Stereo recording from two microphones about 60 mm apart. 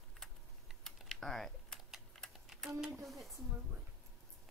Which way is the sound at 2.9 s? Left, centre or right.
Centre.